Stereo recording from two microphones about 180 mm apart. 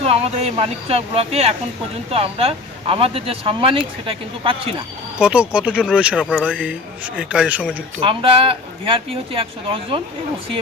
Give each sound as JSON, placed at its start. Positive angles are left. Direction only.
{"t": 0.0, "sound": "speech", "side_deg": -35}
{"t": 5.2, "sound": "a man's voice", "side_deg": -5}
{"t": 8.0, "sound": "speech", "side_deg": -30}